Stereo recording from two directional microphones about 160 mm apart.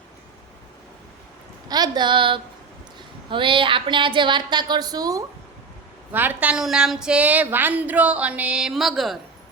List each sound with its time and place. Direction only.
1.6 s speech: 25° right (ahead or behind)
6.1 s a woman's voice: 10° right (ahead or behind)